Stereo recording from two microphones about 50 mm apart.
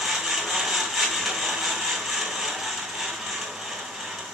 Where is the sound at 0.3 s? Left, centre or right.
Centre.